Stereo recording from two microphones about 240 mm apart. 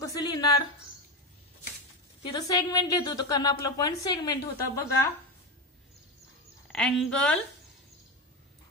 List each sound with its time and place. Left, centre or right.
0.0 s a sound: centre
2.2 s a woman's voice: centre
6.7 s a woman's voice: centre